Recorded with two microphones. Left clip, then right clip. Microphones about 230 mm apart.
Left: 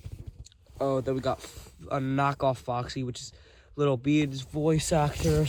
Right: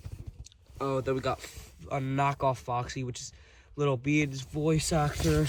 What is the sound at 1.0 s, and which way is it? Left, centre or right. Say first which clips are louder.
Speech: left 1 dB; left.